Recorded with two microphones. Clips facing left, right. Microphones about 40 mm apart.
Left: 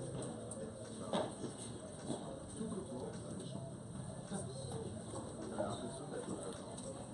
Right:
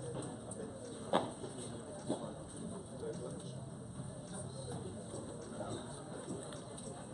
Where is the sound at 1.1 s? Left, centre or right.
Right.